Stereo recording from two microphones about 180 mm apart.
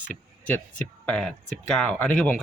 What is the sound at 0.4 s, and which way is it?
A man's voice, 10° left (ahead or behind).